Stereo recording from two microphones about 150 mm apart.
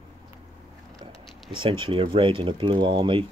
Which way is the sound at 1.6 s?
35° right (ahead or behind).